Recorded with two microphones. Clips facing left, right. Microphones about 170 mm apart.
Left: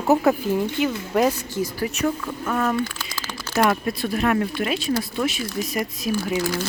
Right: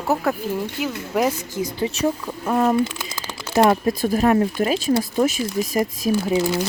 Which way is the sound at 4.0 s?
40° right (ahead or behind).